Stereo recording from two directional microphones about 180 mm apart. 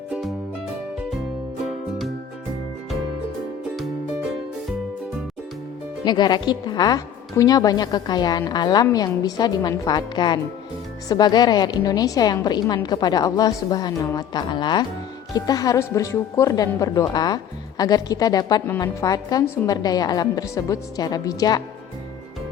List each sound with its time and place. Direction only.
6.1 s speech: 25° left (ahead or behind)